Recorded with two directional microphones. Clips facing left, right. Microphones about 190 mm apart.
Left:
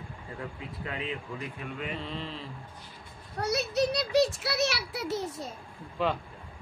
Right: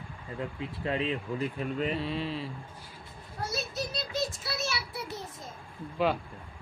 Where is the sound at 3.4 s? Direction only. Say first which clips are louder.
Left 7 dB; 70° left (ahead or behind).